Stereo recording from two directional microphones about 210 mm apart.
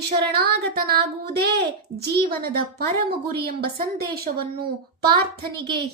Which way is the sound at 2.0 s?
45° right (ahead or behind).